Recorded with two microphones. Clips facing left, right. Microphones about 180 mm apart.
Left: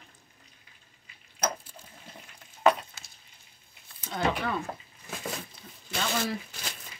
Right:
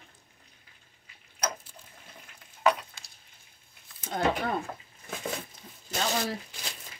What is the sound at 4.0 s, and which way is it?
Speech, 50° right (ahead or behind).